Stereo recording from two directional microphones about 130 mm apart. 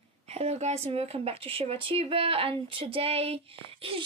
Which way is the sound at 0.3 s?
55° right (ahead or behind).